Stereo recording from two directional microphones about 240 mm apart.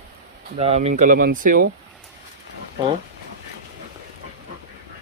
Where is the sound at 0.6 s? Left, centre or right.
Right.